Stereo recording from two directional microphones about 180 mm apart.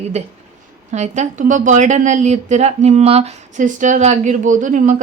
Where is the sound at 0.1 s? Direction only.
40° right (ahead or behind).